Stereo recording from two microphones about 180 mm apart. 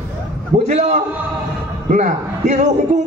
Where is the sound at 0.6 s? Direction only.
40° right (ahead or behind).